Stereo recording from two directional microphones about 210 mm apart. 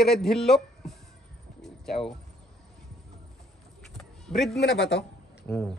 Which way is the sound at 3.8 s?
Centre (ahead or behind).